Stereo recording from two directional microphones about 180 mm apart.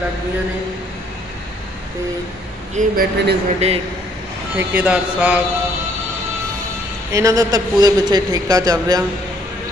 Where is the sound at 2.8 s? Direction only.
45° right (ahead or behind).